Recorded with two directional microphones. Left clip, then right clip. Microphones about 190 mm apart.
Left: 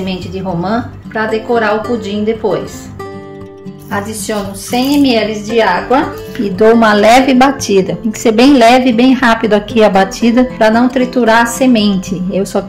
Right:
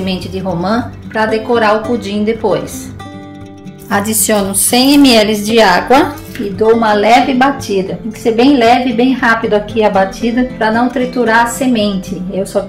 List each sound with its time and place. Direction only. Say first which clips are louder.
0.0 s a woman's voice: right 1 dB; 5° right (ahead or behind)
3.9 s a woman's voice: right 5 dB; 45° right (ahead or behind)
6.5 s a woman's voice: left 2 dB; 60° left (ahead or behind)
10.2 s a woman's voice: left 4 dB; 50° left (ahead or behind)